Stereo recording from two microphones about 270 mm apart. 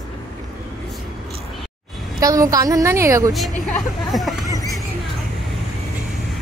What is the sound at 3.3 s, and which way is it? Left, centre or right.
Speech, centre.